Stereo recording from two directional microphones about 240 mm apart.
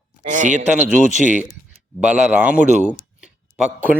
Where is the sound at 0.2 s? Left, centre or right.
Right.